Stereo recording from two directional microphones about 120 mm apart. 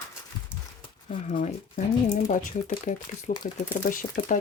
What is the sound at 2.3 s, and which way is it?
Speech, 90° left.